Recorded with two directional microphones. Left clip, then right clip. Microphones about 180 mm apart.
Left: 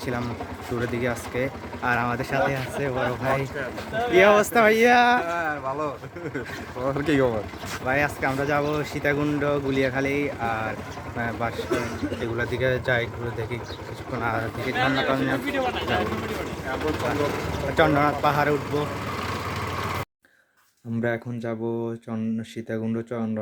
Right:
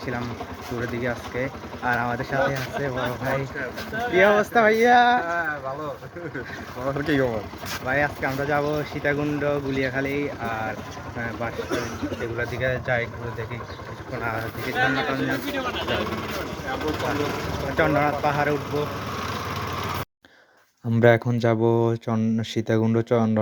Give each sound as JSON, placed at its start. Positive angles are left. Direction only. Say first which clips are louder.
{"t": 0.0, "sound": "speech", "louder": "left 1 dB", "side_deg": 25}
{"t": 4.1, "sound": "speech", "louder": "left 1 dB", "side_deg": 10}
{"t": 6.8, "sound": "speech", "louder": "left 1 dB", "side_deg": 5}
{"t": 7.9, "sound": "speech", "louder": "even", "side_deg": 20}
{"t": 12.4, "sound": "speech", "louder": "left 2 dB", "side_deg": 25}
{"t": 14.1, "sound": "speech", "louder": "left 2 dB", "side_deg": 25}
{"t": 15.5, "sound": "speech", "louder": "left 1 dB", "side_deg": 0}
{"t": 16.7, "sound": "speech", "louder": "even", "side_deg": -25}
{"t": 17.7, "sound": "speech", "louder": "left 1 dB", "side_deg": 25}
{"t": 19.1, "sound": "vehicle", "louder": "even", "side_deg": -25}
{"t": 21.0, "sound": "speech", "louder": "right 10 dB", "side_deg": -40}